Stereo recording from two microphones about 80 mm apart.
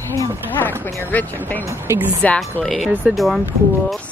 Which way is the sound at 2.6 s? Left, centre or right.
Centre.